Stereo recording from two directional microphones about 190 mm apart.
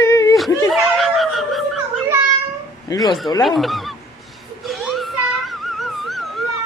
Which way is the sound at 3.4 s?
Centre (ahead or behind).